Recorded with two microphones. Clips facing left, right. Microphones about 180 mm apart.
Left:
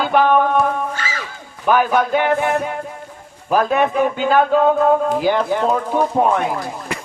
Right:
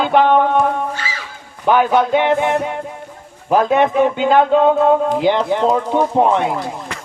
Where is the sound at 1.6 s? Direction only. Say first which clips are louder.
Right 2 dB; 20° right (ahead or behind).